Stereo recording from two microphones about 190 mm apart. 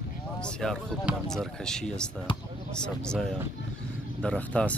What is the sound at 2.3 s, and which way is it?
Speech, 25° left (ahead or behind).